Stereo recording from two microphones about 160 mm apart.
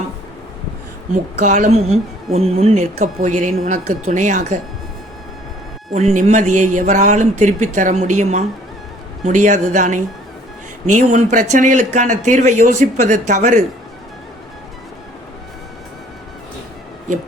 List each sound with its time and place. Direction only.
1.4 s speech: 45° right (ahead or behind)
5.9 s speech: 45° right (ahead or behind)